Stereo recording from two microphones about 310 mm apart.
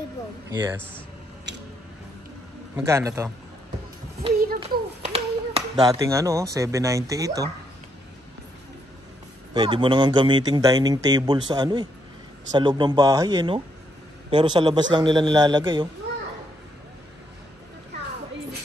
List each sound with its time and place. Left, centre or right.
0.5 s speech: centre
1.5 s a sound: right
2.7 s speech: centre
4.6 s a child's voice: centre
9.5 s speech: centre